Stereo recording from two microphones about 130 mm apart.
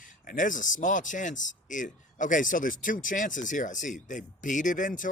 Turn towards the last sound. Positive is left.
turn(degrees=85)